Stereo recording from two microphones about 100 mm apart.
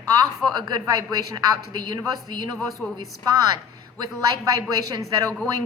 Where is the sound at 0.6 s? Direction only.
35° right (ahead or behind).